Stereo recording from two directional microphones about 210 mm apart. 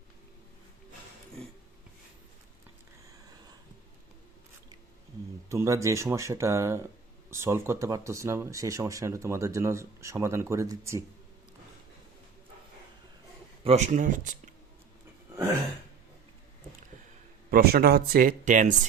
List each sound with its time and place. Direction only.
1.4 s a sound: 5° left (ahead or behind)
5.5 s speech: 15° right (ahead or behind)
13.7 s speech: 35° right (ahead or behind)
17.5 s speech: 45° right (ahead or behind)